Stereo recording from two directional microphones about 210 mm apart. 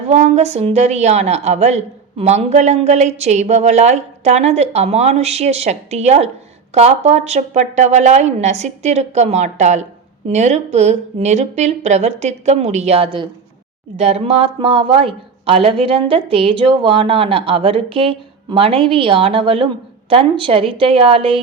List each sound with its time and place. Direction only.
0.1 s a woman's voice: 30° right (ahead or behind)